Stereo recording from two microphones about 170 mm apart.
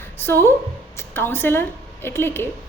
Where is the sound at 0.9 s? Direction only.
15° left (ahead or behind).